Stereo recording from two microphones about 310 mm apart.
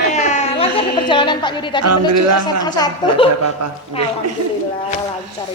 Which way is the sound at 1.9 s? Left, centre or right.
Right.